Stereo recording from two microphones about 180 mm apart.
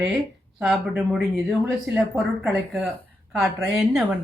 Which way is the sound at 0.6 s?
Centre (ahead or behind).